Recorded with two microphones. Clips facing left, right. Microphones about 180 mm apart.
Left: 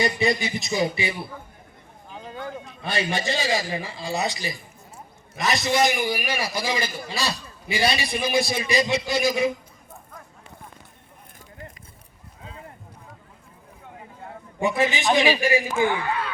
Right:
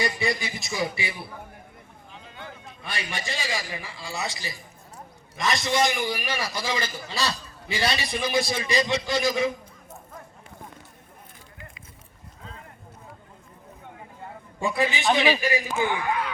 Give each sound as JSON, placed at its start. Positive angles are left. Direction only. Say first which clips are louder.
{"t": 0.0, "sound": "speech", "louder": "left 4 dB", "side_deg": 20}
{"t": 2.2, "sound": "a sound", "louder": "left 9 dB", "side_deg": 45}
{"t": 2.8, "sound": "a man's voice", "louder": "left 8 dB", "side_deg": 25}
{"t": 14.6, "sound": "a man's voice", "louder": "left 2 dB", "side_deg": 20}
{"t": 15.9, "sound": "speech", "louder": "left 1 dB", "side_deg": -15}